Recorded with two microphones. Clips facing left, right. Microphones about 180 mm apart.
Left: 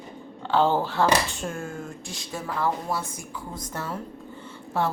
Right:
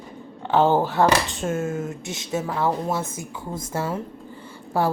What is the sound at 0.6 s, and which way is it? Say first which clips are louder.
Speech: right 6 dB; 20° right (ahead or behind).